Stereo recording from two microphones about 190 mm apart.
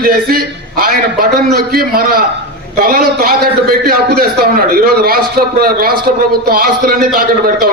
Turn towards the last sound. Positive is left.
turn(degrees=-50)  # may be behind; listen again after turning